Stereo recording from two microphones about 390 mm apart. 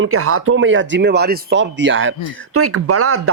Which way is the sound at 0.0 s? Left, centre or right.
Right.